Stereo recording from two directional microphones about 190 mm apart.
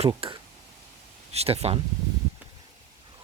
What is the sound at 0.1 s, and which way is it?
Speech, 25° right (ahead or behind).